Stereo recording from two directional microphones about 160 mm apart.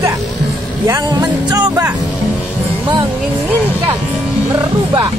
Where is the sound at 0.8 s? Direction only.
20° right (ahead or behind).